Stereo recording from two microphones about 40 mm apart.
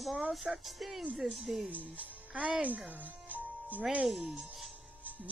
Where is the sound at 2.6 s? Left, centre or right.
Right.